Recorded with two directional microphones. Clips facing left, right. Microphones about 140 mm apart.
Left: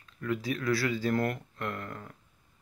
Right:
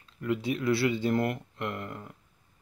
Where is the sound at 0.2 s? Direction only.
20° right (ahead or behind).